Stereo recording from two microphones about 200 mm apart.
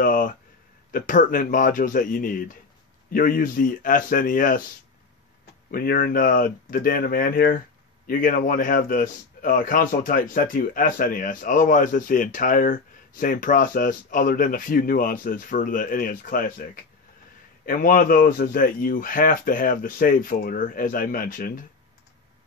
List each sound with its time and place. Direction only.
0.0 s a sound: 45° left (ahead or behind)
0.9 s a man's voice: 40° left (ahead or behind)
5.7 s a man's voice: 45° left (ahead or behind)